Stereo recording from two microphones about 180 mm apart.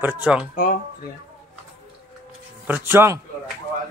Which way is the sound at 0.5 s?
50° left (ahead or behind).